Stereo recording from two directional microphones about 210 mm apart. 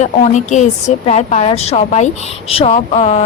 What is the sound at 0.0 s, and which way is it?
Speech, 35° left (ahead or behind).